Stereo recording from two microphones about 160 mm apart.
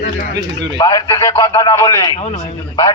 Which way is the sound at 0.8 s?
25° left (ahead or behind).